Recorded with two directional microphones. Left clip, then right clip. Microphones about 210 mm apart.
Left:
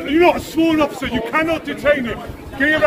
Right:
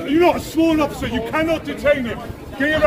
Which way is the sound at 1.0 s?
30° right (ahead or behind).